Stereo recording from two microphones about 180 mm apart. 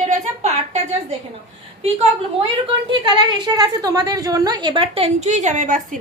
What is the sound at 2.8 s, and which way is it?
A woman's voice, 25° right (ahead or behind).